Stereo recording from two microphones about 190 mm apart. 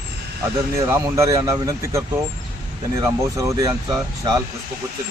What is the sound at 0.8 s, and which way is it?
Speech, 15° right (ahead or behind).